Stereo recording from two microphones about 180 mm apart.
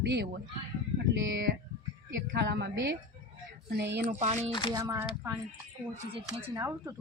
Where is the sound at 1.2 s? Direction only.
90° right.